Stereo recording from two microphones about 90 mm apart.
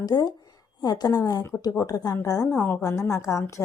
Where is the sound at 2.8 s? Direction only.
40° left (ahead or behind).